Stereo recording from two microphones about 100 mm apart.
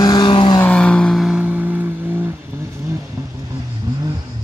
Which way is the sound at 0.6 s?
10° left (ahead or behind).